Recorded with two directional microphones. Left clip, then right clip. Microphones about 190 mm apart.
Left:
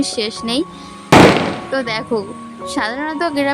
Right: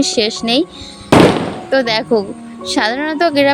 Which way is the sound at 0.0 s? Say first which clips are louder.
Right 5 dB; 15° right (ahead or behind).